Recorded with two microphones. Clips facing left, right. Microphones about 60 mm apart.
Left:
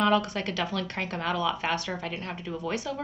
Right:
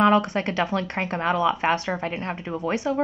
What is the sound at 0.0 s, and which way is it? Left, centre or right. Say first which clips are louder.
Speech: right 6 dB; right.